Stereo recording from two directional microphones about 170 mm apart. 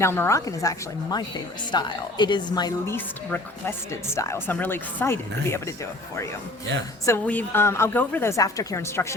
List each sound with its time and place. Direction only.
0.0 s a woman's voice: 15° left (ahead or behind)
7.0 s a woman's voice: 15° left (ahead or behind)